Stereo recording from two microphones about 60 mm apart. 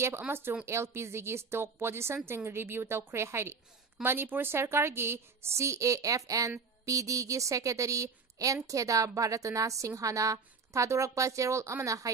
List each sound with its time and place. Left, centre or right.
0.3 s a woman's voice: right